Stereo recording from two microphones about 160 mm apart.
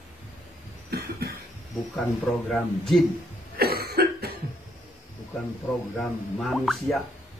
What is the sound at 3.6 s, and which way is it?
Cough, 75° right (ahead or behind).